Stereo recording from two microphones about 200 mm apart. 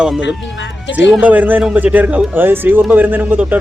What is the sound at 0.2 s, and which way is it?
Speech, 65° left (ahead or behind).